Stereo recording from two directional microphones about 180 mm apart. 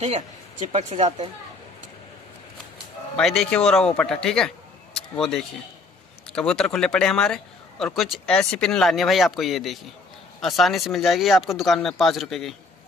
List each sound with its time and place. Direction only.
0.7 s speech: 35° right (ahead or behind)
3.2 s speech: 5° left (ahead or behind)